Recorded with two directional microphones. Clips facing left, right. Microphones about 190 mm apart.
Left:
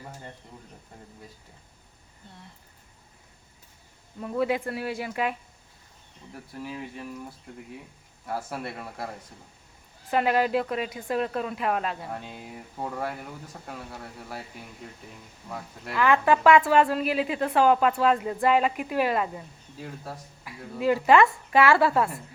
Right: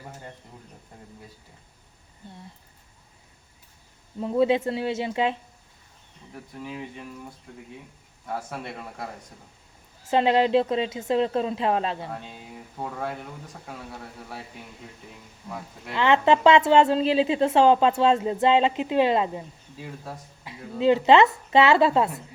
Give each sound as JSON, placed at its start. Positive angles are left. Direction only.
{"t": 4.2, "sound": "a woman's voice", "side_deg": -25}
{"t": 6.6, "sound": "speech", "side_deg": 5}
{"t": 8.3, "sound": "speech", "side_deg": 5}
{"t": 10.1, "sound": "a woman's voice", "side_deg": -25}
{"t": 15.9, "sound": "a woman's voice", "side_deg": -25}